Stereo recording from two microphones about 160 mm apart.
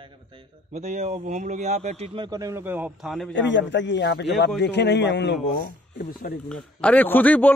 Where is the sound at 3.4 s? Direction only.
90° left; by 6.3 s 70° left (ahead or behind).